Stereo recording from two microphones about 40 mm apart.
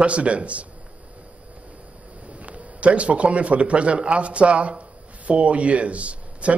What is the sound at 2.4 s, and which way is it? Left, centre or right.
Speech, right.